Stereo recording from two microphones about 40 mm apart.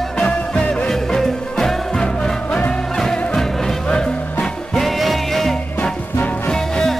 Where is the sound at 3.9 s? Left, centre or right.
Left.